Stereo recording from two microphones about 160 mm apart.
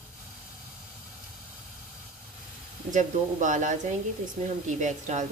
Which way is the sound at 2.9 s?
50° right (ahead or behind).